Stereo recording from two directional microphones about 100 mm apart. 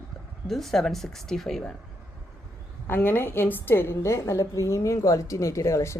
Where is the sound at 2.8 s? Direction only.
20° left (ahead or behind).